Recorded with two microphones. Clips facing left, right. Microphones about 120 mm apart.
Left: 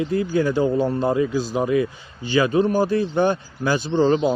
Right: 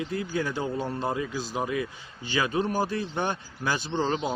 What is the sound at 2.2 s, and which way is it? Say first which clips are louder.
Speech: left 9 dB; 50° left (ahead or behind).